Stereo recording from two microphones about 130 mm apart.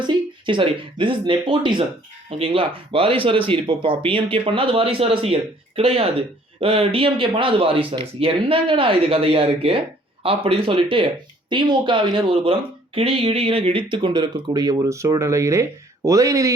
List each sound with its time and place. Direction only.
0.4 s speech: 40° right (ahead or behind); by 16.5 s 25° right (ahead or behind)